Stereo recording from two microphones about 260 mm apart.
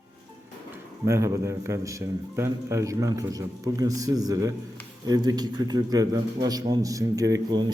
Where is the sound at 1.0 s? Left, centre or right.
Centre.